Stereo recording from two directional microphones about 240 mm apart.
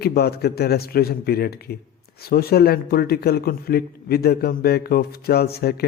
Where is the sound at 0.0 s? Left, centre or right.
Left.